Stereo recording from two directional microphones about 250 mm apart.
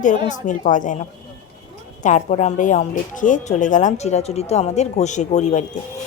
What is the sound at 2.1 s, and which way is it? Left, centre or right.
A woman's voice, left.